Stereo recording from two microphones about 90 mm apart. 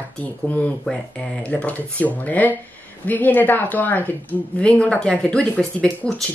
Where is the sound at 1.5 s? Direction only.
15° left (ahead or behind).